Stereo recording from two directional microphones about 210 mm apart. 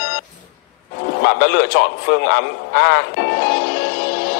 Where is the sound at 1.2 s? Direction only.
50° left (ahead or behind).